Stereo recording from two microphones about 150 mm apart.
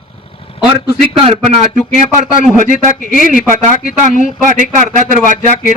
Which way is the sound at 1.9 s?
55° right (ahead or behind).